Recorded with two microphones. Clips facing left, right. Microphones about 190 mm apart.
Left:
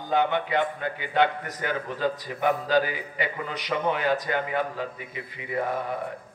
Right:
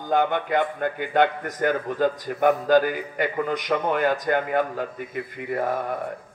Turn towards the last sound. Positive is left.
turn(degrees=-50)  # may be behind; listen again after turning